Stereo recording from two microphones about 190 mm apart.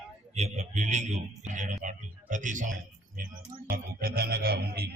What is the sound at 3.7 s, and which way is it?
Music, 50° right (ahead or behind).